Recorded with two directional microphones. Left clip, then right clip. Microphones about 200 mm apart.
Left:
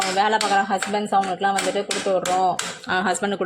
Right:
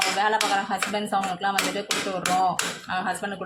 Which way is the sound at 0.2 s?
30° left (ahead or behind).